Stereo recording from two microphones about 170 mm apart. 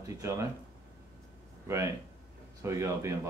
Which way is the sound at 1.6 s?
15° right (ahead or behind).